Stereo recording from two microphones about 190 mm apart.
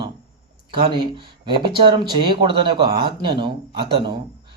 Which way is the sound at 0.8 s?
25° right (ahead or behind).